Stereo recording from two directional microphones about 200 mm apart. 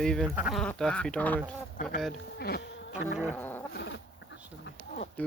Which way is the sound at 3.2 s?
10° left (ahead or behind).